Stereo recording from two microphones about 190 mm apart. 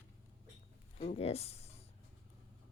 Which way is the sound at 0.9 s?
35° left (ahead or behind).